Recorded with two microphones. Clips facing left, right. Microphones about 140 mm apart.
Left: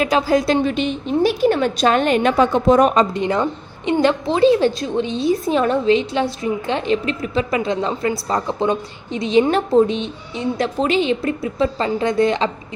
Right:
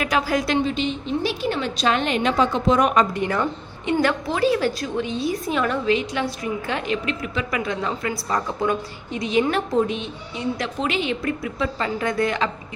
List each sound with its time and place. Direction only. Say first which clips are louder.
0.0 s a woman's voice: left 5 dB; 30° left (ahead or behind)
0.6 s a woman's voice: left 4 dB; 60° left (ahead or behind)
2.8 s a woman's voice: left 4 dB; 25° left (ahead or behind)